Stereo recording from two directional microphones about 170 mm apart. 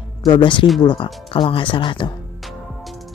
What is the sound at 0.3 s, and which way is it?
Speech, 30° left (ahead or behind).